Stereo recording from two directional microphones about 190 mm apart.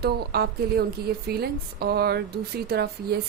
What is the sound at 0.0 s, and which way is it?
A woman's voice, 55° right (ahead or behind).